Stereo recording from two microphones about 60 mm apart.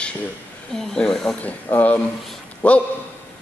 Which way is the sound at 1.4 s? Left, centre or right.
Left.